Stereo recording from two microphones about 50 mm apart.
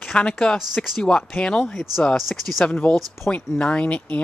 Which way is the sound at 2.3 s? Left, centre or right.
Centre.